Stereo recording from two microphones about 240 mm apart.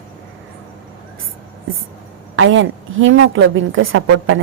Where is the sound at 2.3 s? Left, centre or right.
Right.